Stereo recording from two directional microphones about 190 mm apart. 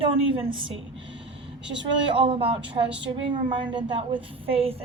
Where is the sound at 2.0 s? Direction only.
25° right (ahead or behind).